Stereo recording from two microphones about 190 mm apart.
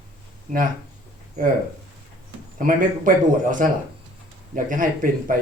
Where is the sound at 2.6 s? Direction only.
45° right (ahead or behind).